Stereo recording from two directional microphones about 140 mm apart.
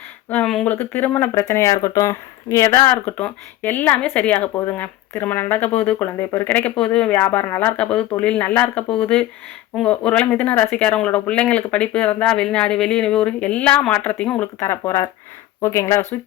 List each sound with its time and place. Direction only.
0.3 s speech: 5° left (ahead or behind); by 2.9 s 25° left (ahead or behind)
2.9 s speech: 10° left (ahead or behind)